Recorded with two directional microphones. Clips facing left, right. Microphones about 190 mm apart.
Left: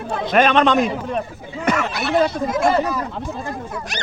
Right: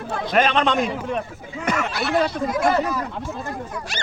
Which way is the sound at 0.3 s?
75° left (ahead or behind).